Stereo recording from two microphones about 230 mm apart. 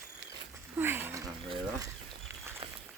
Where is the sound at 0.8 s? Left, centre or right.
Centre.